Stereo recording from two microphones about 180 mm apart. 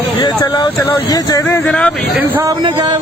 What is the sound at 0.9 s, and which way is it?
Speech, 20° left (ahead or behind).